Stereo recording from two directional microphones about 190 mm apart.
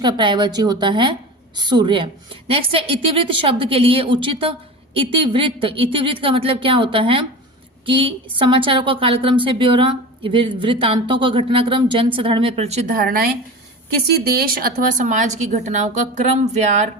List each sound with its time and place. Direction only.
0.0 s a woman's voice: 25° right (ahead or behind)